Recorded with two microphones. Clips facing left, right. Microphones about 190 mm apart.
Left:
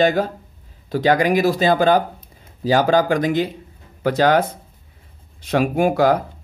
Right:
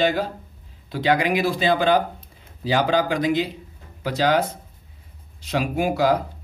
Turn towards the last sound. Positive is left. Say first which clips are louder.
# left 4 dB
turn(degrees=55)  # may be behind; listen again after turning